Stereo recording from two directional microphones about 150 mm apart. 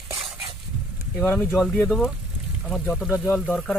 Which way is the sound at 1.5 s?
Centre (ahead or behind).